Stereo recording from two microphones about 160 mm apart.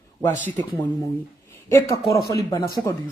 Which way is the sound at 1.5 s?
20° left (ahead or behind).